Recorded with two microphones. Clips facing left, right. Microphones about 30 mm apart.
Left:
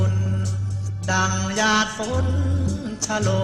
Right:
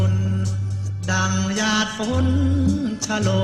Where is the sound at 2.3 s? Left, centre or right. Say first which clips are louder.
Right 6 dB; centre.